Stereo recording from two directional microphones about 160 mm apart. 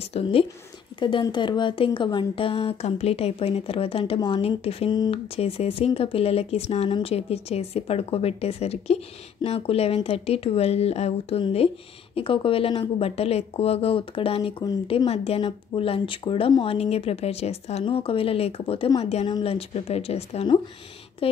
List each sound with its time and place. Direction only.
0.1 s speech: 35° left (ahead or behind)